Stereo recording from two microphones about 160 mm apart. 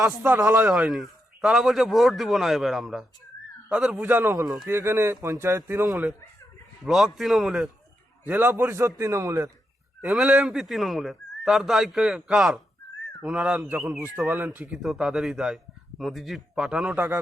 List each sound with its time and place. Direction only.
0.3 s speech: 20° right (ahead or behind)
0.5 s a man's voice: 5° right (ahead or behind)
5.9 s a man's voice: 5° right (ahead or behind)
8.3 s speech: 10° right (ahead or behind)
10.0 s a man's voice: 5° right (ahead or behind)
14.3 s speech: 15° right (ahead or behind)
14.6 s a man's voice: 5° right (ahead or behind)